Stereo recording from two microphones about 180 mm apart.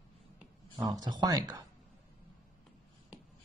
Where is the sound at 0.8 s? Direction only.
20° right (ahead or behind).